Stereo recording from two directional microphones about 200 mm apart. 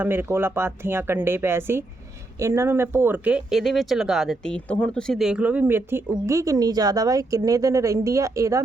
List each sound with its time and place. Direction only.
0.0 s speech: 10° right (ahead or behind)